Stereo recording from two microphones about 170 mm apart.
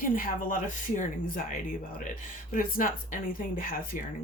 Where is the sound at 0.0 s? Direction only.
55° left (ahead or behind).